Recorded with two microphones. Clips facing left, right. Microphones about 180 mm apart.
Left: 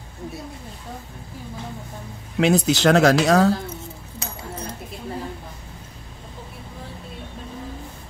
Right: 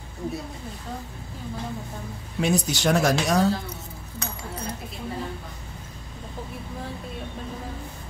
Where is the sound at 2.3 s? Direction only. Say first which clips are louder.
Left 6 dB; 75° left (ahead or behind).